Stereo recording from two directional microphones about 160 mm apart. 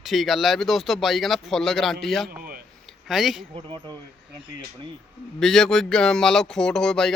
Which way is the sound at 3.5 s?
30° right (ahead or behind).